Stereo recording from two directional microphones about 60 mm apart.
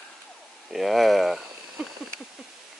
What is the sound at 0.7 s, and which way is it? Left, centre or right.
Speech, centre.